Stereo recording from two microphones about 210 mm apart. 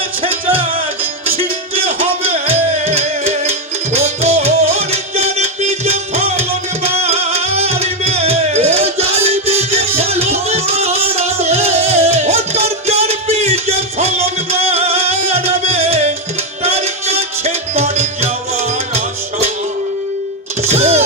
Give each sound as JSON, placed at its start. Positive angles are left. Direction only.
{"t": 0.2, "sound": "music", "side_deg": -25}
{"t": 20.6, "sound": "music", "side_deg": -30}